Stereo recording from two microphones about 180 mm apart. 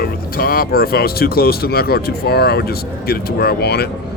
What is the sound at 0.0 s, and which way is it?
Speech, 55° left (ahead or behind).